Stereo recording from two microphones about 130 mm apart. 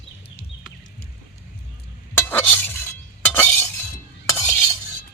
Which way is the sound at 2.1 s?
15° left (ahead or behind).